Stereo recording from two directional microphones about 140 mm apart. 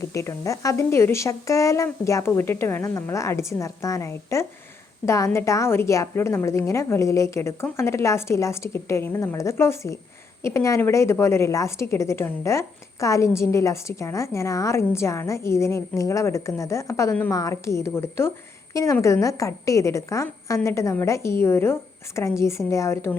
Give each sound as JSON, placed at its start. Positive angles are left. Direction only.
{"t": 0.0, "sound": "a woman's voice", "side_deg": 20}